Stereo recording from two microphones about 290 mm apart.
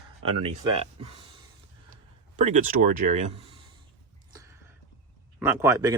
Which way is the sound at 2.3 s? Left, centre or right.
Right.